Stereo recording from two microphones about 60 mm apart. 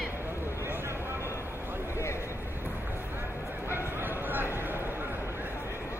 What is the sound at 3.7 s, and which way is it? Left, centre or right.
Bow-wow, right.